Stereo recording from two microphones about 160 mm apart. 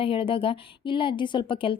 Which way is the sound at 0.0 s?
35° left (ahead or behind).